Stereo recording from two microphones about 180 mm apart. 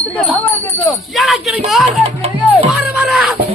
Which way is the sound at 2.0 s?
35° right (ahead or behind).